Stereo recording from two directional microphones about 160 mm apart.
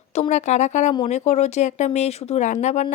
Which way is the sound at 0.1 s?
45° left (ahead or behind).